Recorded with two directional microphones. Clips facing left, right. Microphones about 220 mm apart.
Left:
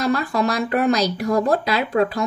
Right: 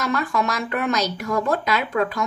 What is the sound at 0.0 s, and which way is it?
Speech, 35° left (ahead or behind).